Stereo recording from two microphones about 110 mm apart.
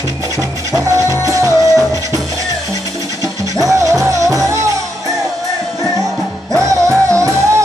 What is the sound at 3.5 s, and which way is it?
Music, 30° right (ahead or behind).